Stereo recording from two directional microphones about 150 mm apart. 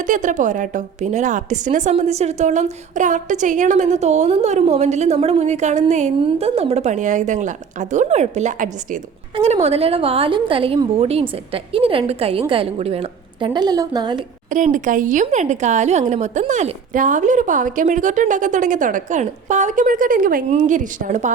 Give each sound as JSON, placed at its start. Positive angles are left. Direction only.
{"t": 0.0, "sound": "a woman's voice", "side_deg": -55}
{"t": 9.3, "sound": "a woman's voice", "side_deg": -45}
{"t": 14.5, "sound": "speech", "side_deg": -60}